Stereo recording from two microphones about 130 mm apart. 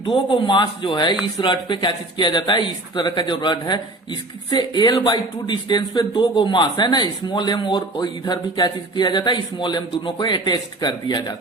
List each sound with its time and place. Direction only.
0.0 s speech: 40° left (ahead or behind)